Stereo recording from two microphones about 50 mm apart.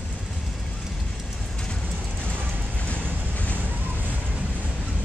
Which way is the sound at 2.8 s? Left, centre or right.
Left.